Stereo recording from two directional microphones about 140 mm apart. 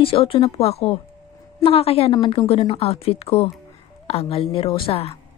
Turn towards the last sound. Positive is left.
turn(degrees=45)  # may be behind; listen again after turning